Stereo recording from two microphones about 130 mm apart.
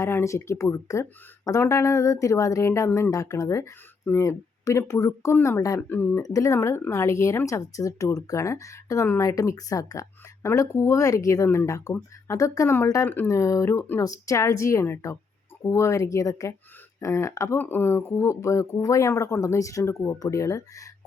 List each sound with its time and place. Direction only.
0.0 s speech: 20° left (ahead or behind)